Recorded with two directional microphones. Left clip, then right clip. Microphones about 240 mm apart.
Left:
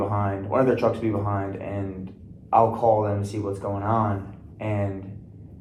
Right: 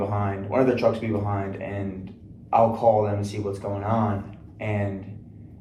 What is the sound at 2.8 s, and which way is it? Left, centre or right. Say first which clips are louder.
Speech: right 1 dB; centre.